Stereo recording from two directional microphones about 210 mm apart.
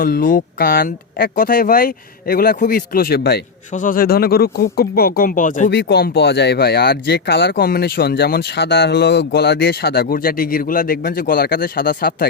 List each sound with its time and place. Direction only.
0.0 s speech: 45° left (ahead or behind)
3.7 s speech: 40° left (ahead or behind)
5.7 s speech: 50° left (ahead or behind)